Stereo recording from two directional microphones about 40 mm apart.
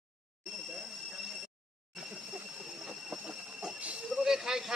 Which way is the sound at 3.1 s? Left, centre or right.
Right.